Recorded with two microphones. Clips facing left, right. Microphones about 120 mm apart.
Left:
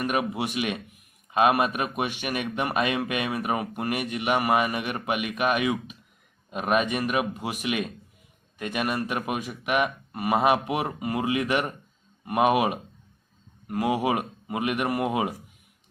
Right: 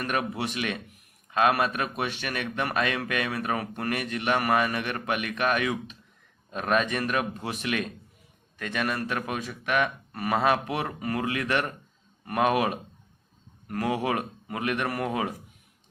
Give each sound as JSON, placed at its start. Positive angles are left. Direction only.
{"t": 0.0, "sound": "speech", "side_deg": 15}